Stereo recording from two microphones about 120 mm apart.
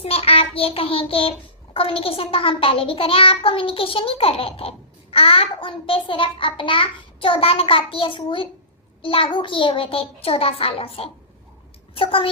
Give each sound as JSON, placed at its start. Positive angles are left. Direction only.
{"t": 0.0, "sound": "child singing", "side_deg": 55}
{"t": 1.7, "sound": "a child's voice", "side_deg": 50}